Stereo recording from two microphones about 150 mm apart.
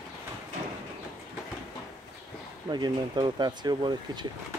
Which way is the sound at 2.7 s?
30° right (ahead or behind).